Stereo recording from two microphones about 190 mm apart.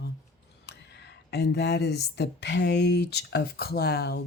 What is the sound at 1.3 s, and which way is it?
Speech, 65° left (ahead or behind).